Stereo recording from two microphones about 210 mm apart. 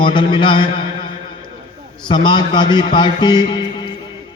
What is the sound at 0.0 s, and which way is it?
Speech, 25° left (ahead or behind).